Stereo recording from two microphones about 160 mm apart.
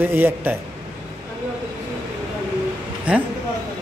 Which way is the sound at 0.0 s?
15° right (ahead or behind).